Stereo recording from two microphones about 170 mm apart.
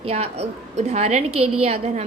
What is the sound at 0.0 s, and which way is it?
A woman's voice, 40° right (ahead or behind).